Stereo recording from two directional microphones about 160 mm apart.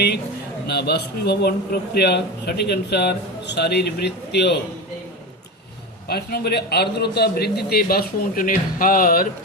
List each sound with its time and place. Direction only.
0.7 s a man's voice: 90° left
6.1 s a man's voice: 80° left; by 9.2 s 60° left (ahead or behind)